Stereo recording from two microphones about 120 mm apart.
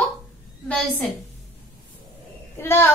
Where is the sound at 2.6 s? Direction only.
20° left (ahead or behind).